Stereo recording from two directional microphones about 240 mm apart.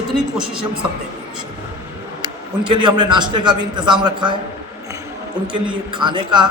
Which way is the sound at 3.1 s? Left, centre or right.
Centre.